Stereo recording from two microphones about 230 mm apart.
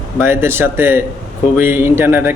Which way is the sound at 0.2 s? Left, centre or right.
Centre.